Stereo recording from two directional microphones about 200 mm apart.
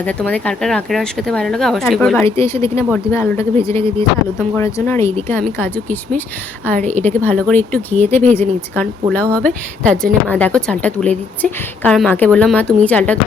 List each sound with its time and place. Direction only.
0.0 s speech: 5° left (ahead or behind)